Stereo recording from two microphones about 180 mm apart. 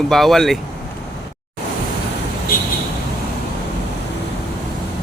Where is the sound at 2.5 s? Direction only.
50° left (ahead or behind).